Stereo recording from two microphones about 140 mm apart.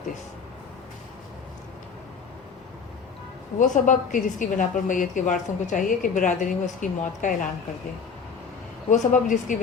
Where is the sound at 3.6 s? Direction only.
65° left (ahead or behind).